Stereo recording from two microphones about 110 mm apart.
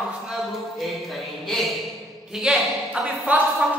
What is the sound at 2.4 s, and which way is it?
A woman's voice, 5° right (ahead or behind).